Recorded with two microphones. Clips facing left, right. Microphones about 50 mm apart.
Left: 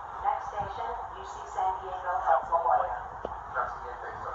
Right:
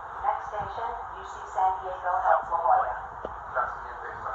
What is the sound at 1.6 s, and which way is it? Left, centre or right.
Speech, right.